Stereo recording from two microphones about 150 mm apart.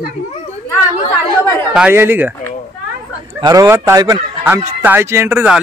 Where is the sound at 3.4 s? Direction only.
20° right (ahead or behind).